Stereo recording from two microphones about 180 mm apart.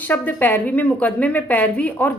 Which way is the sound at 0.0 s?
10° left (ahead or behind).